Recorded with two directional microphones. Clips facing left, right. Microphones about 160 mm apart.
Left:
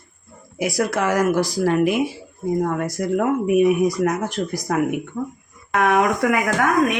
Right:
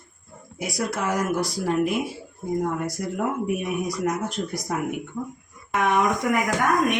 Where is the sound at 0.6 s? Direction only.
75° left (ahead or behind).